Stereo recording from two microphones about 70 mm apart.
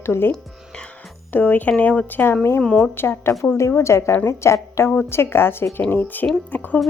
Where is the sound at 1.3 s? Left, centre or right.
Left.